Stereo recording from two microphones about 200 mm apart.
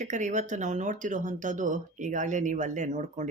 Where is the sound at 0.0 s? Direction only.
35° right (ahead or behind).